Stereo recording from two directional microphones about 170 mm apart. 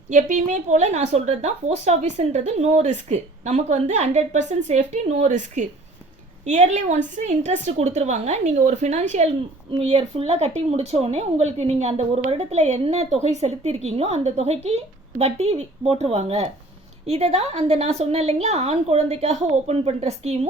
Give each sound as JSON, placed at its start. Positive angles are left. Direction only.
{"t": 0.1, "sound": "speech", "side_deg": -45}